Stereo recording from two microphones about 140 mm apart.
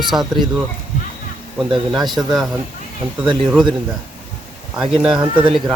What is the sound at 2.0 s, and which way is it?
Speech, 30° right (ahead or behind).